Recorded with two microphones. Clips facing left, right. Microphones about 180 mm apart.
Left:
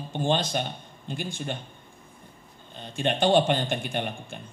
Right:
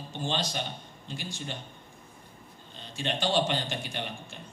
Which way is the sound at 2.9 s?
55° left (ahead or behind).